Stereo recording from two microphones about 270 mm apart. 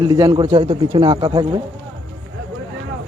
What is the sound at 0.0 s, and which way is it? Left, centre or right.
Speech, centre.